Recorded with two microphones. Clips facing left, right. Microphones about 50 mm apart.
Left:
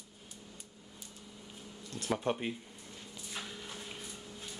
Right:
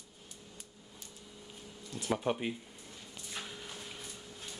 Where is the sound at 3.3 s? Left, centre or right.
Centre.